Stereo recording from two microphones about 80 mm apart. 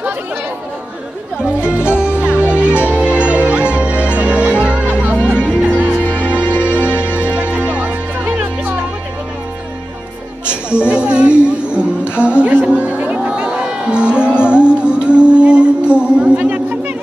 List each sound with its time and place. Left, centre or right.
2.0 s music: centre
5.1 s music: left
5.6 s music: centre
10.4 s music: centre